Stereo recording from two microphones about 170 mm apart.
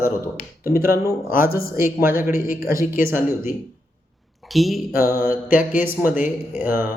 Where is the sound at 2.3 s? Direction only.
60° left (ahead or behind).